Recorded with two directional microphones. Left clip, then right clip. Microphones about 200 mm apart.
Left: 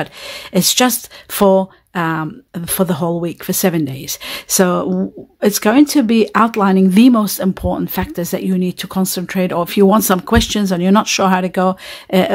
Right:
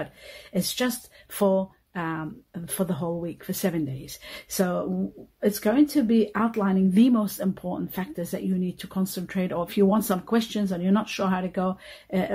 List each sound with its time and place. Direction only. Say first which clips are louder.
0.0 s speech: left 12 dB; 45° left (ahead or behind)